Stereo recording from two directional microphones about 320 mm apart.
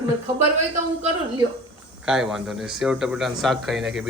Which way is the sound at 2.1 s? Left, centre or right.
Centre.